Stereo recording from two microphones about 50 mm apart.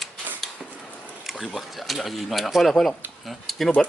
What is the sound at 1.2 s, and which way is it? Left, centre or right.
Speech, centre.